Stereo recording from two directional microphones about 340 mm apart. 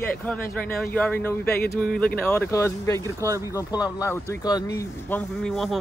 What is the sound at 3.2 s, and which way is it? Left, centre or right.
Speech, centre.